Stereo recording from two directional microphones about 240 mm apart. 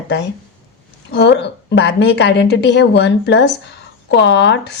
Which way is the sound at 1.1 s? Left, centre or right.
Left.